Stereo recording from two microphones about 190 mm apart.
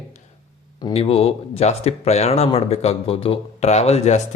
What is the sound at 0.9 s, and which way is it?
Speech, 30° left (ahead or behind).